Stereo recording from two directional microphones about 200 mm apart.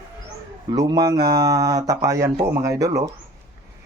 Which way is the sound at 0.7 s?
20° right (ahead or behind).